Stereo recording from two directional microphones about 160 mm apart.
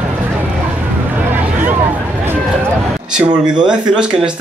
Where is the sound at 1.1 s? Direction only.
10° right (ahead or behind).